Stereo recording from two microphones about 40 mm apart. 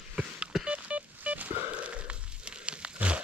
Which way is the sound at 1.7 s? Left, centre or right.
Right.